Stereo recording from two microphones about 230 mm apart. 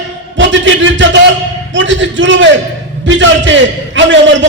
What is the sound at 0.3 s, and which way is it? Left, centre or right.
A man's voice, right.